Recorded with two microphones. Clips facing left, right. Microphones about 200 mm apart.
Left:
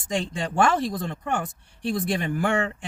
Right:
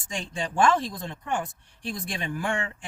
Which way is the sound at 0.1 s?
60° left (ahead or behind).